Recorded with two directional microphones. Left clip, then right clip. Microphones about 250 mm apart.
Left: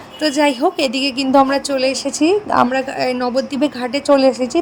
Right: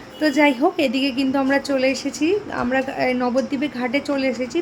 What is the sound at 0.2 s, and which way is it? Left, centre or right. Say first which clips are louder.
A woman's voice: left 2 dB; left.